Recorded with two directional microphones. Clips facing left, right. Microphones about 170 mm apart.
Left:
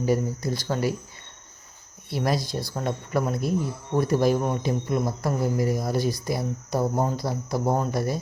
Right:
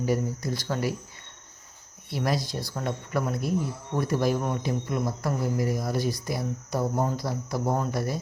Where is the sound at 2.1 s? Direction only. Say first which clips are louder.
Left 2 dB; 35° left (ahead or behind).